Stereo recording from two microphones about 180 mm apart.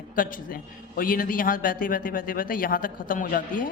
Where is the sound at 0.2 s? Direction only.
50° left (ahead or behind).